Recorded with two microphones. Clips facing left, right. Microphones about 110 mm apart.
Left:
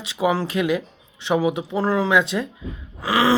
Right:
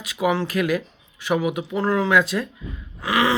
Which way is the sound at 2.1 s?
20° left (ahead or behind).